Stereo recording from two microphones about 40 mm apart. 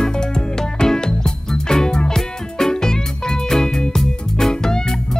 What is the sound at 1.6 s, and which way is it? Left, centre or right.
Music, centre.